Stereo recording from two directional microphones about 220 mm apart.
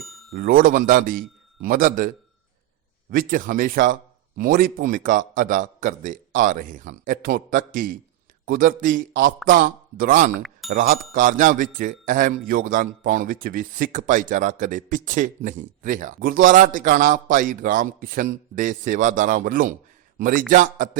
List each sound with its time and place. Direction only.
0.0 s a sound: centre (ahead or behind)
0.3 s speech: 40° right (ahead or behind)
3.1 s speech: 40° right (ahead or behind)